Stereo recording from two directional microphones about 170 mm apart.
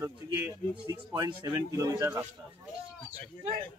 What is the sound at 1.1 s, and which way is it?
A man's voice, 20° right (ahead or behind).